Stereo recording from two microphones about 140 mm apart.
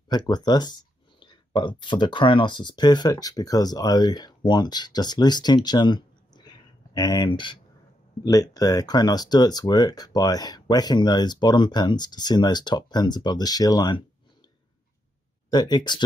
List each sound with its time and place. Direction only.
0.1 s speech: 30° left (ahead or behind)
15.5 s speech: 30° left (ahead or behind)